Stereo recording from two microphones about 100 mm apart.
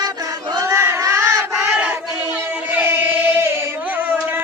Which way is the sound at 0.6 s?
25° right (ahead or behind).